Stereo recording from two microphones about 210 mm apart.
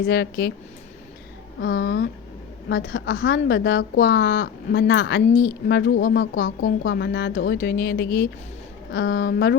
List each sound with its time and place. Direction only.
0.0 s speech: 50° left (ahead or behind)
1.6 s a woman's voice: 55° left (ahead or behind)